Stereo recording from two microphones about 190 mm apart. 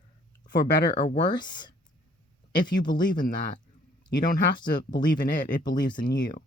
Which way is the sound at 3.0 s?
45° left (ahead or behind).